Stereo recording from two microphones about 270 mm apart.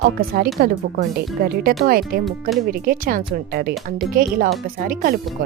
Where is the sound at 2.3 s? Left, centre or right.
Centre.